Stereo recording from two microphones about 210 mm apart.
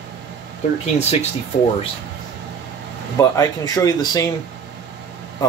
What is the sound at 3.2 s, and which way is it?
Speech, 15° left (ahead or behind).